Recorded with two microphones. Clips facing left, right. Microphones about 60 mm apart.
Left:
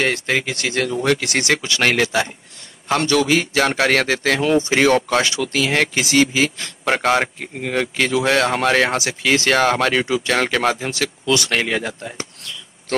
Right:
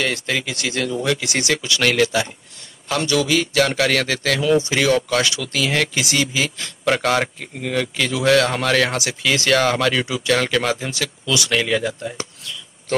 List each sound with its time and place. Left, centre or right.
0.0 s a man's voice: left